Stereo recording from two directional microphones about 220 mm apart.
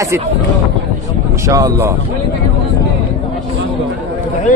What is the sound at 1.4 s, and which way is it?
Speech, 15° right (ahead or behind).